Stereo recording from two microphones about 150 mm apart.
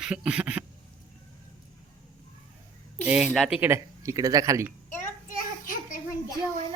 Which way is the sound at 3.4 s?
5° right (ahead or behind).